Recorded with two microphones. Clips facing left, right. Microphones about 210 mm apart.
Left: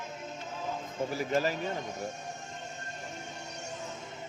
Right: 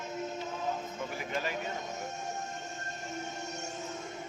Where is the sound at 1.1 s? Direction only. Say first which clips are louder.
Left 8 dB; 40° left (ahead or behind).